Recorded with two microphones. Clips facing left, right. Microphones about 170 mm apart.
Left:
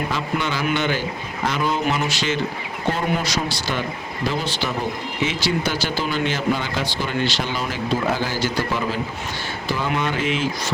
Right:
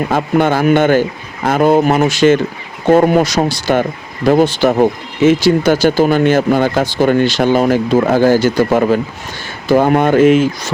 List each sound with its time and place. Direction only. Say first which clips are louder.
0.1 s speech: right 11 dB; 55° right (ahead or behind)